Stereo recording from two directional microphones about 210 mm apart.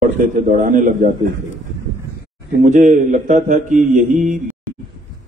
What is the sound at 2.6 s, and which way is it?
A man's voice, 35° right (ahead or behind).